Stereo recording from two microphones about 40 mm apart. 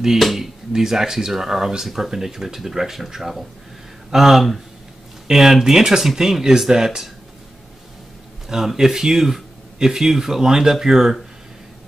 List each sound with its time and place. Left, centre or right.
0.2 s speech: centre
0.7 s speech: centre
8.5 s speech: centre